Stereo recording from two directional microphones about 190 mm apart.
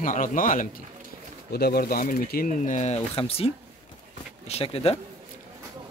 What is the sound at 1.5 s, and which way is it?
Speech, 55° left (ahead or behind).